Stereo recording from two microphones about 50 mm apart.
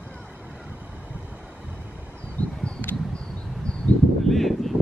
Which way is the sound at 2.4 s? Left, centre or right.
Left.